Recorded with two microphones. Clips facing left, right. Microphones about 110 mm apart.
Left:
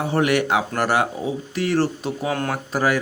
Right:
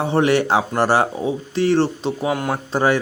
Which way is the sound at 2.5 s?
25° right (ahead or behind).